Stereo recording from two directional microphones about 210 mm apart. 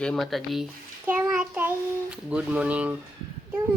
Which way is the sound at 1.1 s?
10° right (ahead or behind).